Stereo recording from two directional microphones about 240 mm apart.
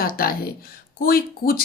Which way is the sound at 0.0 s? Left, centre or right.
Left.